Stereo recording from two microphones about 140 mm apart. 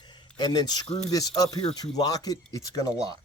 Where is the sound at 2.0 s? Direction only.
25° left (ahead or behind).